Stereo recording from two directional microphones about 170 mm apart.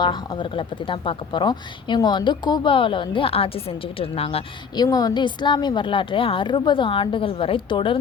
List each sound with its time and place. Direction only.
0.0 s speech: 25° left (ahead or behind)
4.8 s speech: 20° left (ahead or behind)